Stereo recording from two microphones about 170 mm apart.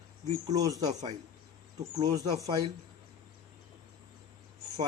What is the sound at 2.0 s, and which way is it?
Speech, 20° right (ahead or behind).